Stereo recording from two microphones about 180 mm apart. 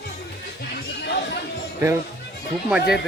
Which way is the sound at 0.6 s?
65° left (ahead or behind).